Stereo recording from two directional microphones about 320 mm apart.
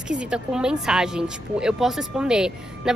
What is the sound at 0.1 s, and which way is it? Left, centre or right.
Speech, centre.